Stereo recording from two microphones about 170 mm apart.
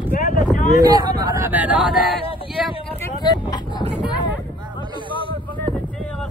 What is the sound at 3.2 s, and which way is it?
Speech, 25° left (ahead or behind).